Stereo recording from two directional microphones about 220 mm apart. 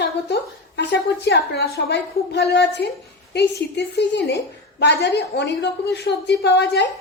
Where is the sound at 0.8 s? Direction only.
50° left (ahead or behind).